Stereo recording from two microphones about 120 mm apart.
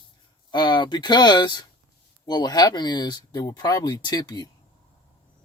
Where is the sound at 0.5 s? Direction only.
40° left (ahead or behind).